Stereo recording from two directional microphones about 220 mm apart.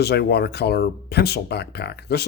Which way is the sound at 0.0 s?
50° left (ahead or behind).